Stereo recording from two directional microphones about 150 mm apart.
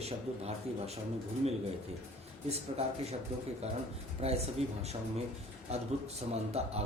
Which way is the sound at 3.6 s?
45° right (ahead or behind).